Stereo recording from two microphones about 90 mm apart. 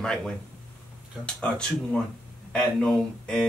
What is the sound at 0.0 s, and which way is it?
Speech, 5° left (ahead or behind).